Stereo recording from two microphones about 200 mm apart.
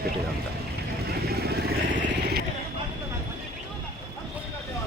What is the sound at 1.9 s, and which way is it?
Vehicle, 60° right (ahead or behind).